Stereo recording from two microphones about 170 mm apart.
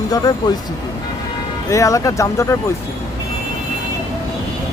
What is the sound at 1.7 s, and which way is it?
Speech, 20° left (ahead or behind).